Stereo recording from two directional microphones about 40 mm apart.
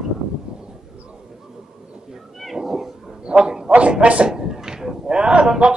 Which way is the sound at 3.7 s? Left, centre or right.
Right.